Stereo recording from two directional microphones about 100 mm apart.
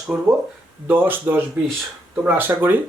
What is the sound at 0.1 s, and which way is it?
A man's voice, 15° right (ahead or behind).